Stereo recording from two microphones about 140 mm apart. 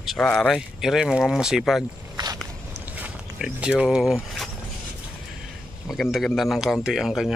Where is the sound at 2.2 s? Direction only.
30° right (ahead or behind).